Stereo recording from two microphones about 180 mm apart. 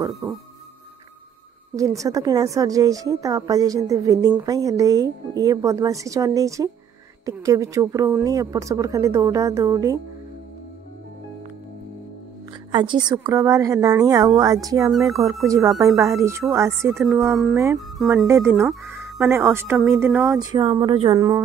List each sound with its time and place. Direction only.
0.2 s a woman's voice: 15° right (ahead or behind)
1.8 s a woman's voice: 20° right (ahead or behind)
12.7 s a woman's voice: 25° right (ahead or behind)
14.9 s speech: centre (ahead or behind)
15.4 s a woman's voice: 20° right (ahead or behind)
17.0 s speech: centre (ahead or behind)
18.9 s a woman's voice: 15° right (ahead or behind)
20.3 s a woman's voice: 25° right (ahead or behind)